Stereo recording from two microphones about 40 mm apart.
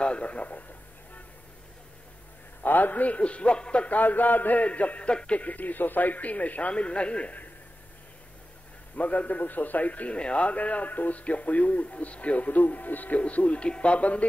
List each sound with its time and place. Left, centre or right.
0.0 s a man's voice: left
2.6 s a man's voice: left
4.0 s speech: left
4.6 s a man's voice: left
5.4 s a man's voice: left
8.9 s a man's voice: left